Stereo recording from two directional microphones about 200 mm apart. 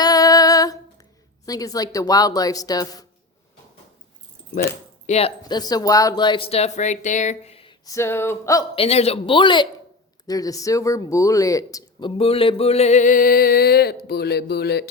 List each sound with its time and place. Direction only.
0.0 s female singing: 20° left (ahead or behind)
1.5 s speech: 20° left (ahead or behind)
5.0 s speech: 30° left (ahead or behind)
5.4 s speech: 20° left (ahead or behind)
8.7 s speech: 30° left (ahead or behind); by 14.8 s 55° left (ahead or behind)